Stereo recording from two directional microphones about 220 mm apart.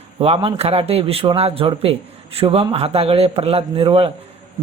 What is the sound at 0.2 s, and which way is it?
Speech, 25° right (ahead or behind).